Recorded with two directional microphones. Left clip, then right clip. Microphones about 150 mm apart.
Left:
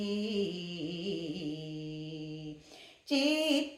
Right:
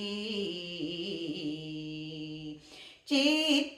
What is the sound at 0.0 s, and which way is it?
Music, 35° left (ahead or behind).